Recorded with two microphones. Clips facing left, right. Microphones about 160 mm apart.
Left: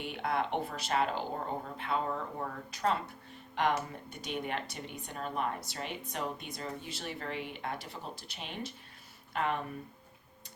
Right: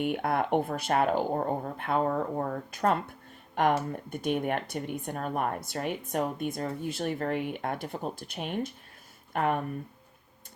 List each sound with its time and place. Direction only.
0.0 s speech: 55° right (ahead or behind)